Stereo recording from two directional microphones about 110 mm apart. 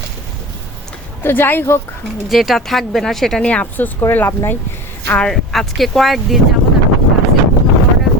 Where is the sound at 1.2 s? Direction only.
20° left (ahead or behind).